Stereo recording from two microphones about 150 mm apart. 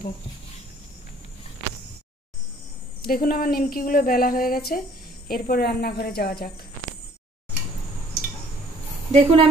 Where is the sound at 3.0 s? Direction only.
85° left.